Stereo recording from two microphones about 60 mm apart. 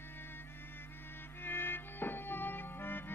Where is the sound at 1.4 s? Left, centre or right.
Left.